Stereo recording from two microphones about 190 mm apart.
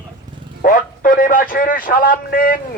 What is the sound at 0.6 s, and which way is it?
Speech, 45° left (ahead or behind).